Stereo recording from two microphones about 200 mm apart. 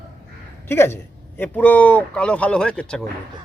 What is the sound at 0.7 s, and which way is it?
A man's voice, 10° left (ahead or behind).